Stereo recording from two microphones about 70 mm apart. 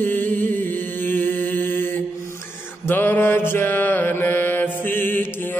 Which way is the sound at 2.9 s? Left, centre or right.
Left.